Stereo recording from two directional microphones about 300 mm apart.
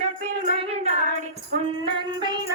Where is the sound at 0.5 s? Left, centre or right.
Right.